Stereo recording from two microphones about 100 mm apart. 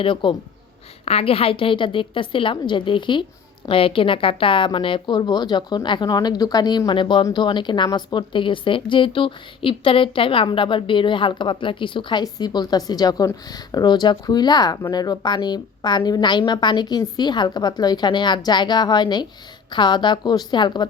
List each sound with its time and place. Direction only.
0.0 s a woman's voice: 55° left (ahead or behind)
1.0 s a woman's voice: 80° left; by 12.2 s 55° left (ahead or behind)
12.2 s a woman's voice: 40° left (ahead or behind)